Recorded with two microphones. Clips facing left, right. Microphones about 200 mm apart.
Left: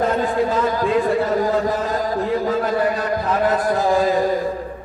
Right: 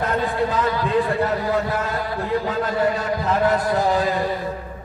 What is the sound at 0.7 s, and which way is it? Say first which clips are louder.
A man's voice: left 3 dB; 45° left (ahead or behind).